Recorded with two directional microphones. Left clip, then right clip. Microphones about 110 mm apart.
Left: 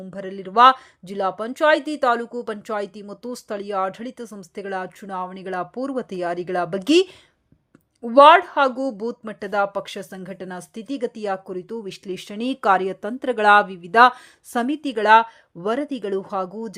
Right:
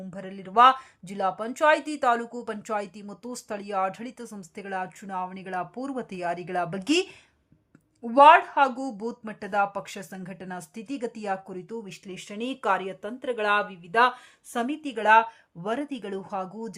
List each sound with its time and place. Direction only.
0.1 s speech: 35° left (ahead or behind); by 14.1 s 90° left
14.5 s speech: 60° left (ahead or behind); by 16.7 s 40° left (ahead or behind)